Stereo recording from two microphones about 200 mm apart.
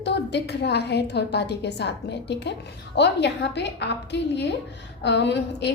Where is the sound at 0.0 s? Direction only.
60° left (ahead or behind).